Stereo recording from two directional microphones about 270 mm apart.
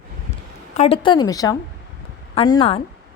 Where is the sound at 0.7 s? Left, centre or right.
Left.